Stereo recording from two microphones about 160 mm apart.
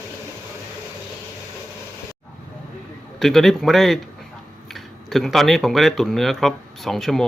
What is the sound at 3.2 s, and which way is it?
Speech, centre (ahead or behind).